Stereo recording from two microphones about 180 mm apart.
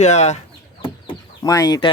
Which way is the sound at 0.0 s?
40° left (ahead or behind).